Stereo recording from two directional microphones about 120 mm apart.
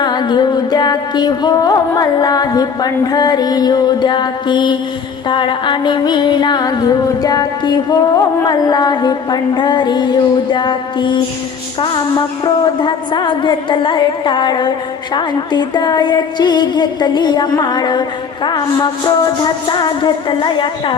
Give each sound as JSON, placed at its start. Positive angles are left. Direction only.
{"t": 0.0, "sound": "music", "side_deg": 35}
{"t": 12.6, "sound": "music", "side_deg": 40}